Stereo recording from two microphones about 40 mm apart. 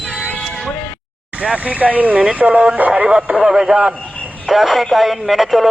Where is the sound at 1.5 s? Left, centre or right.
Right.